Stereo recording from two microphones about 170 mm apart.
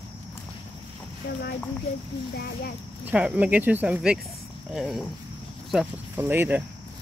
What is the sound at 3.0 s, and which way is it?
Speech, 10° right (ahead or behind).